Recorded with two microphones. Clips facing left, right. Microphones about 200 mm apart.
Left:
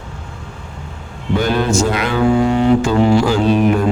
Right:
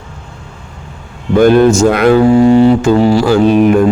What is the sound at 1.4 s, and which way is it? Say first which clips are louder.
Speech: right 10 dB; 50° right (ahead or behind).